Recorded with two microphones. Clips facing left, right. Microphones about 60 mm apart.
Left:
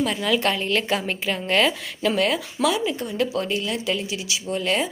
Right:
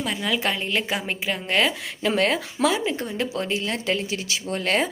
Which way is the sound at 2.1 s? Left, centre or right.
Right.